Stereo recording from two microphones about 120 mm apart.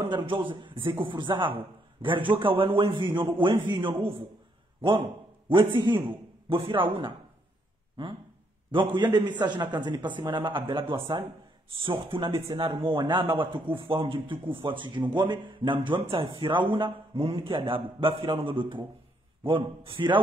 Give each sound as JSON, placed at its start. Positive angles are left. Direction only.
{"t": 0.0, "sound": "a man's voice", "side_deg": -45}
{"t": 5.5, "sound": "a man's voice", "side_deg": -45}
{"t": 8.7, "sound": "a man's voice", "side_deg": -40}